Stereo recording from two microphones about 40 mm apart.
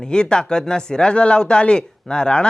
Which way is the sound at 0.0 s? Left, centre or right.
Left.